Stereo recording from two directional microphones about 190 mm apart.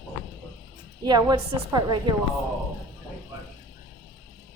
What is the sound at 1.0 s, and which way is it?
Speech, 20° right (ahead or behind).